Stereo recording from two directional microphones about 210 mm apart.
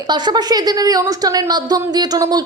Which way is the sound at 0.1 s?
20° right (ahead or behind).